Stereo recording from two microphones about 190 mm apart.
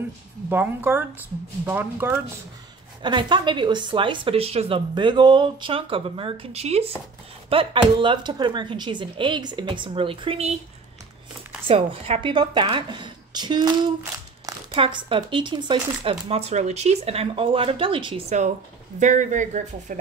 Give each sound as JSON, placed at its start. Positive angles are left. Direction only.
{"t": 0.5, "sound": "speech", "side_deg": -10}
{"t": 3.0, "sound": "a woman's voice", "side_deg": -25}
{"t": 11.6, "sound": "a woman's voice", "side_deg": -30}